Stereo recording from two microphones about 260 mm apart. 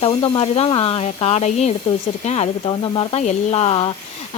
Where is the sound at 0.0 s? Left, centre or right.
Left.